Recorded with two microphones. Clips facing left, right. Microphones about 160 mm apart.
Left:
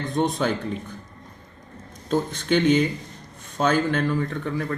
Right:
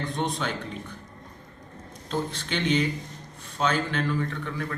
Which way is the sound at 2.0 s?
45° left (ahead or behind).